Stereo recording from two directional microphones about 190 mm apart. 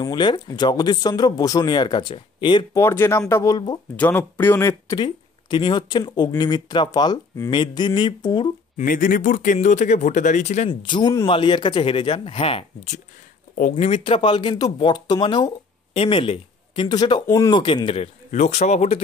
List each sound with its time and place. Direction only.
0.0 s speech: 25° left (ahead or behind)
8.7 s speech: 45° left (ahead or behind)
10.7 s speech: 25° left (ahead or behind)